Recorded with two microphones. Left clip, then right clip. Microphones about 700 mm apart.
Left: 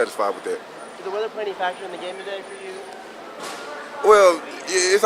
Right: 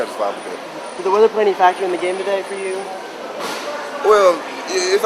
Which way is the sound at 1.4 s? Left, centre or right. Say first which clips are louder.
Right 12 dB; centre.